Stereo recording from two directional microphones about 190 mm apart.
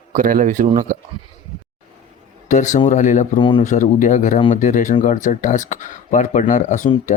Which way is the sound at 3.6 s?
40° left (ahead or behind).